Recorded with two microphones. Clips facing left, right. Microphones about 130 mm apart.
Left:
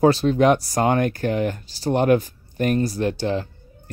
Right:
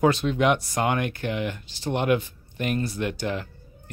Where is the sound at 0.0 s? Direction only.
35° left (ahead or behind).